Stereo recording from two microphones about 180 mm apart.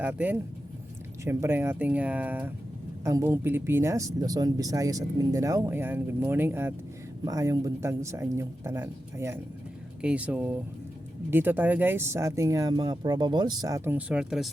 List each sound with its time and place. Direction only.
0.0 s speech: 10° right (ahead or behind)